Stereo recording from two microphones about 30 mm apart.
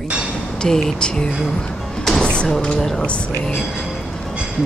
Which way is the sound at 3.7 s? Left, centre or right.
Centre.